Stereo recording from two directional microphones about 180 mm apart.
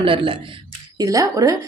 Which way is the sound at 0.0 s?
30° right (ahead or behind).